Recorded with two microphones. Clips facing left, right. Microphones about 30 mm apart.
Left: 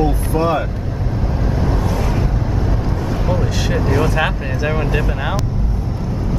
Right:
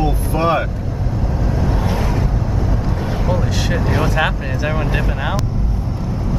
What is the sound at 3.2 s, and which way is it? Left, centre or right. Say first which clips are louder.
Vehicle: even; centre.